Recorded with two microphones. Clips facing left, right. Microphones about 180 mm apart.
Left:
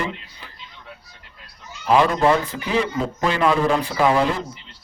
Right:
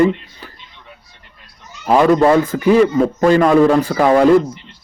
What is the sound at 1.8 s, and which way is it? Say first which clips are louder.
A man's voice: right 5 dB; 50° right (ahead or behind).